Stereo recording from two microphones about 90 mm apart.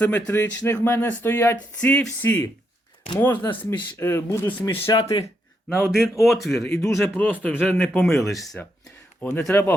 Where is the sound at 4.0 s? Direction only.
25° left (ahead or behind).